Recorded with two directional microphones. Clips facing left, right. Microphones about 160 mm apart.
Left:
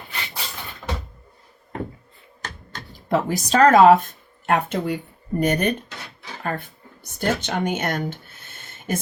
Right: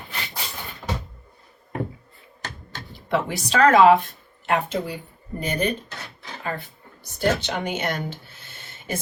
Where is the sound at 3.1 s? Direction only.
40° left (ahead or behind).